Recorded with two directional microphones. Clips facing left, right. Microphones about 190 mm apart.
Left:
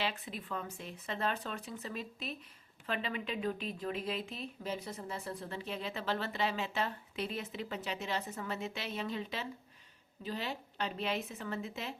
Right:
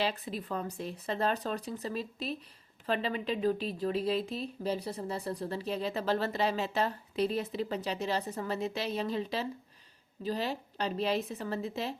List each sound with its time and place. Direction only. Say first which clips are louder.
0.0 s speech: right 5 dB; 40° right (ahead or behind)